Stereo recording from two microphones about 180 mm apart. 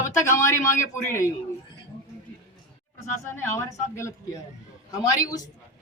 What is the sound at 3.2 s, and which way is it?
Speech, 15° left (ahead or behind).